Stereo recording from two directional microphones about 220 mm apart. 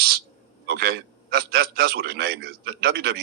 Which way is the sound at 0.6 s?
45° right (ahead or behind).